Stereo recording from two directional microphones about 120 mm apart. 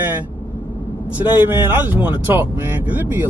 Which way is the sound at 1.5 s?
15° right (ahead or behind).